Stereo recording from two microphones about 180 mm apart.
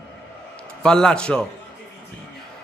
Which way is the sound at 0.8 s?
5° left (ahead or behind).